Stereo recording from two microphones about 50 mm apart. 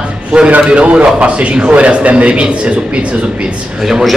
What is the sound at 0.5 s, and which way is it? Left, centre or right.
A man's voice, right.